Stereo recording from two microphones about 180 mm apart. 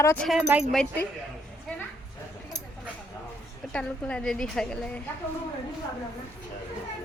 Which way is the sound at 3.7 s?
5° left (ahead or behind).